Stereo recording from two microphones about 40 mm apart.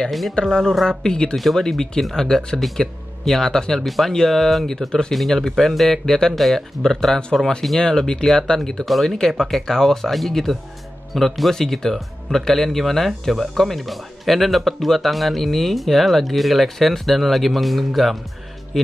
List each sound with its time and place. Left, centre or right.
0.3 s speech: centre
1.3 s speech: centre
3.8 s speech: centre
5.1 s speech: centre
8.8 s speech: centre